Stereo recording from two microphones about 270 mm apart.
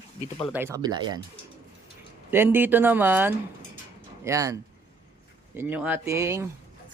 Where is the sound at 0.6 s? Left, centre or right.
Centre.